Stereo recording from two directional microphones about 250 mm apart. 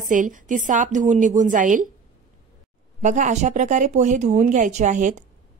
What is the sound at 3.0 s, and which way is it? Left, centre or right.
Speech, right.